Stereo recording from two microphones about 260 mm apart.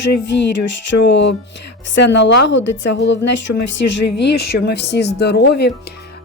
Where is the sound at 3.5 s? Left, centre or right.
Left.